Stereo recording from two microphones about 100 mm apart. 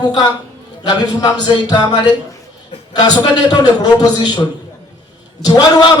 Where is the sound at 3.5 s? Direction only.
45° left (ahead or behind).